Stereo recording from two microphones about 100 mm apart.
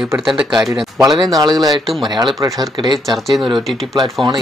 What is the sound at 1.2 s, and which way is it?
Speech, 40° right (ahead or behind).